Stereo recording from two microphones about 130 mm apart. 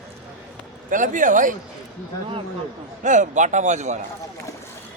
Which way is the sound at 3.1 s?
70° right (ahead or behind).